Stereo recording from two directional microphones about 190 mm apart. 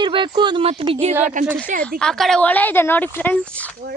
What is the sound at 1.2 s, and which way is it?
Speech, 40° right (ahead or behind).